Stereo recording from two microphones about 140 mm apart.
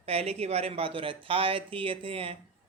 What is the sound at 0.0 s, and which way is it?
Speech, 45° right (ahead or behind).